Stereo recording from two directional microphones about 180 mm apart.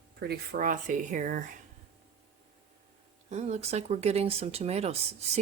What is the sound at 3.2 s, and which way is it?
Speech, 40° right (ahead or behind).